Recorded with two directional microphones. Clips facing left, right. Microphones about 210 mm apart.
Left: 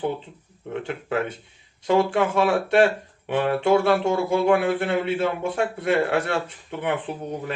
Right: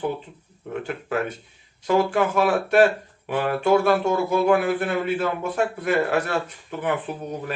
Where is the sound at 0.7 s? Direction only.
25° left (ahead or behind).